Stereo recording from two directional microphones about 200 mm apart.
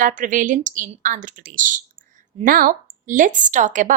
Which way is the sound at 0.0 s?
40° right (ahead or behind).